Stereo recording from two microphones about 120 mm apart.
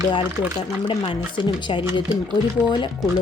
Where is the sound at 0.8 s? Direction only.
40° left (ahead or behind).